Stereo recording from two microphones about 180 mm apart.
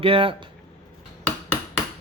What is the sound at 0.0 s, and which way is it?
Speech, 30° right (ahead or behind).